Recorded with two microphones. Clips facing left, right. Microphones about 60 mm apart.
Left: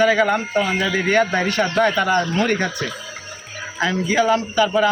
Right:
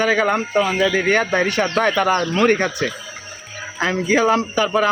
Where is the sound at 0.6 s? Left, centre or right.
Centre.